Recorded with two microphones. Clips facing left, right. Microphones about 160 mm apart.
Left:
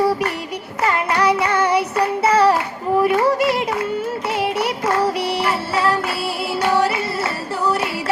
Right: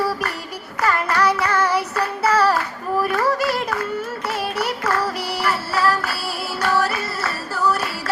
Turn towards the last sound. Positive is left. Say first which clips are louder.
# left 1 dB
turn(degrees=25)  # may be behind; listen again after turning